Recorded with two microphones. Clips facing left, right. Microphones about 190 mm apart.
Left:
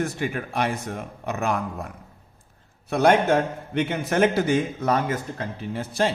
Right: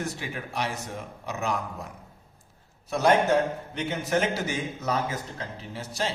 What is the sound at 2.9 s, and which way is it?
Speech, 60° left (ahead or behind).